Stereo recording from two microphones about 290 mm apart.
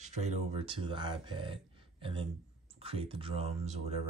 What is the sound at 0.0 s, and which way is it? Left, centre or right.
Speech, right.